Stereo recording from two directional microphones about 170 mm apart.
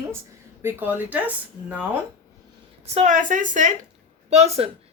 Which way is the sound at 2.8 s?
40° right (ahead or behind).